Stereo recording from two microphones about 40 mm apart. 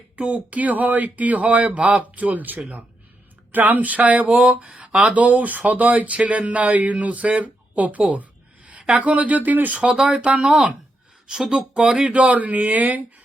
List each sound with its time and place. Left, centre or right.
0.2 s speech: right
4.3 s a sound: right
5.1 s speech: right
8.1 s a sound: right
9.0 s speech: right
9.8 s speech: centre
10.1 s speech: right
11.3 s speech: centre
11.7 s a sound: right
12.0 s speech: right